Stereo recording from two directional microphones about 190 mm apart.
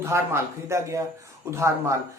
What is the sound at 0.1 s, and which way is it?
Speech, 15° right (ahead or behind).